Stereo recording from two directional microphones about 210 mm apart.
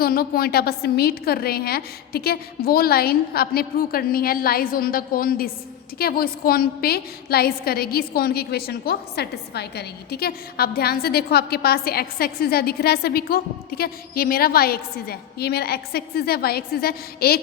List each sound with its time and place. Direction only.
0.0 s a woman's voice: 45° left (ahead or behind)